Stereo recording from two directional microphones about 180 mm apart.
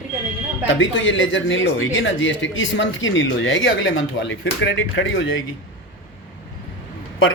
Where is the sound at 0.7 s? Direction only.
90° left.